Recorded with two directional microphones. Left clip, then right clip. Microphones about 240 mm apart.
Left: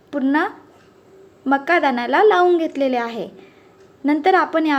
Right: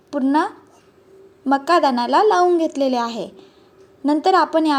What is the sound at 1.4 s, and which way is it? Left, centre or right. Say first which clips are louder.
Speech: right 1 dB; centre.